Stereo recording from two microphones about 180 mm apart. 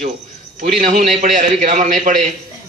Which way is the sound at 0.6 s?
45° right (ahead or behind).